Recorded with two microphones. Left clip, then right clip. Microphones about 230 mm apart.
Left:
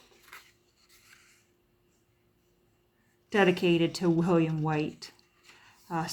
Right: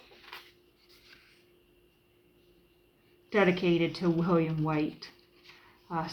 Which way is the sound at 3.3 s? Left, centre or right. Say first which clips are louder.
Left 1 dB; left.